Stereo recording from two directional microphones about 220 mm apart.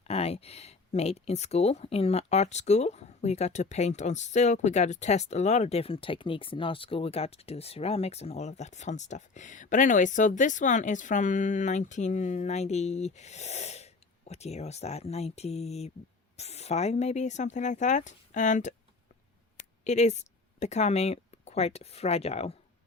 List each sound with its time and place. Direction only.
0.1 s speech: 25° left (ahead or behind)
19.8 s speech: 30° left (ahead or behind)